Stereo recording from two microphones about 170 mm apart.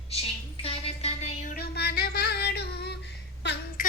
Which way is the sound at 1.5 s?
70° left (ahead or behind).